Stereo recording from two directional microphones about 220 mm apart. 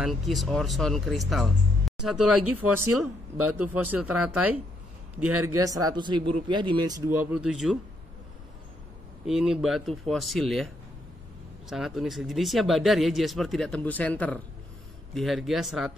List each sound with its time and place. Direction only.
0.0 s speech: centre (ahead or behind)
2.4 s speech: 90° right
3.6 s speech: 10° right (ahead or behind)
5.6 s speech: 15° right (ahead or behind)
9.2 s speech: centre (ahead or behind)
11.7 s speech: centre (ahead or behind)